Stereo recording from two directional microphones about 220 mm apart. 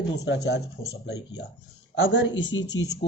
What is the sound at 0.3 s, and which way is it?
Speech, 50° left (ahead or behind).